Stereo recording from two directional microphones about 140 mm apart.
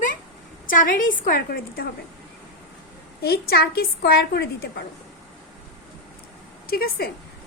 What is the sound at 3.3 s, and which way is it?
Speech, 90° left.